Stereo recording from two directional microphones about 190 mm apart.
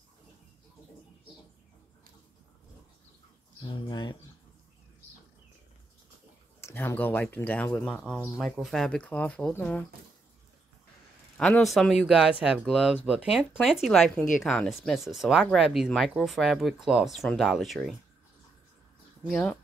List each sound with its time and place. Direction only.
3.6 s speech: 25° left (ahead or behind)
6.6 s speech: 10° left (ahead or behind)
11.3 s speech: 5° left (ahead or behind)
19.2 s speech: centre (ahead or behind)